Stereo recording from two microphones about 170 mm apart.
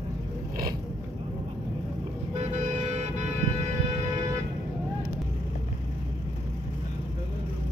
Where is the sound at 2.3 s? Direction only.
40° right (ahead or behind).